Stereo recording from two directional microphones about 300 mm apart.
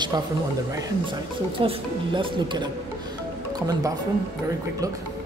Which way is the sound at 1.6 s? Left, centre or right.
Centre.